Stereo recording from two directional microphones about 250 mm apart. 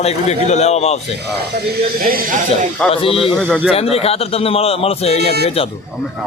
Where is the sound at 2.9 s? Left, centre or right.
Left.